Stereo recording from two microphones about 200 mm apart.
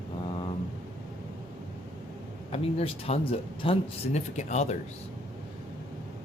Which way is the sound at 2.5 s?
30° left (ahead or behind).